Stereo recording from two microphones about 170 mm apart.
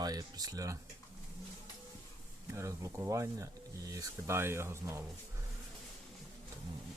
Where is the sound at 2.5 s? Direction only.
15° right (ahead or behind).